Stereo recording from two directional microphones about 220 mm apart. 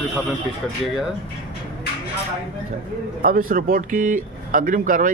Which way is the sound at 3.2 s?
40° right (ahead or behind).